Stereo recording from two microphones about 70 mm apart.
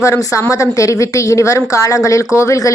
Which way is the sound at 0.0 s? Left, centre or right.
Left.